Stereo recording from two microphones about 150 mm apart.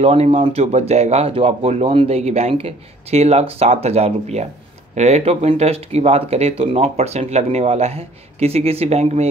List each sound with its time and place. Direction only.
0.0 s speech: 45° right (ahead or behind)